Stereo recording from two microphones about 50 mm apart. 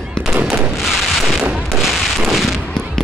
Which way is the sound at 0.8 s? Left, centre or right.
Centre.